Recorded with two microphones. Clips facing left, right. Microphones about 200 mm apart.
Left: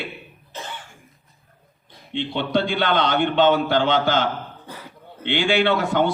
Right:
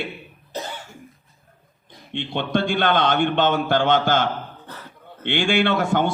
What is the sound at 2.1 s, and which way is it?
A man's voice, 50° right (ahead or behind).